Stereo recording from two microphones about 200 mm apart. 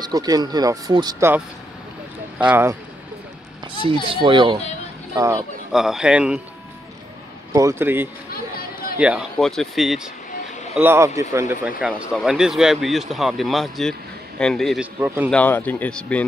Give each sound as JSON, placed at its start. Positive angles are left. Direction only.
{"t": 0.0, "sound": "speech", "side_deg": -20}
{"t": 2.5, "sound": "speech", "side_deg": -15}
{"t": 4.1, "sound": "speech", "side_deg": -25}
{"t": 5.7, "sound": "speech", "side_deg": 0}
{"t": 7.5, "sound": "speech", "side_deg": -15}
{"t": 8.3, "sound": "a sound", "side_deg": 50}
{"t": 8.9, "sound": "speech", "side_deg": -5}
{"t": 10.8, "sound": "speech", "side_deg": -15}
{"t": 11.8, "sound": "speech", "side_deg": -5}
{"t": 15.0, "sound": "speech", "side_deg": -10}
{"t": 15.2, "sound": "speech", "side_deg": 10}